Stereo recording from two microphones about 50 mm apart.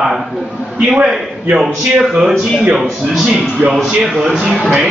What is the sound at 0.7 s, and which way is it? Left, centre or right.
Speech, centre.